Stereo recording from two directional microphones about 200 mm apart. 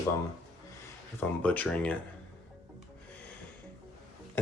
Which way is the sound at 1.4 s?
10° left (ahead or behind).